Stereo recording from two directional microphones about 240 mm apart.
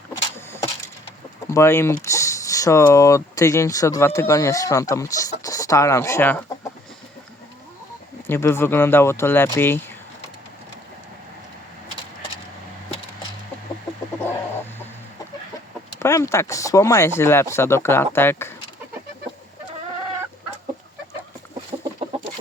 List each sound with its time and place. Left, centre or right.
0.3 s wood: centre
1.5 s speech: centre
8.3 s speech: centre
16.0 s speech: centre
21.7 s chicken: right